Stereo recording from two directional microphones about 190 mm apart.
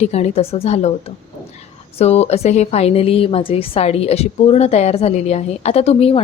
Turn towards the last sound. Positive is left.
turn(degrees=30)  # may be behind; listen again after turning